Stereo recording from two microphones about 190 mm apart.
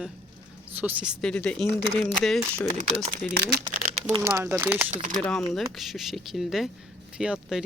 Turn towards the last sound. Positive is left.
turn(degrees=-5)  # may be behind; listen again after turning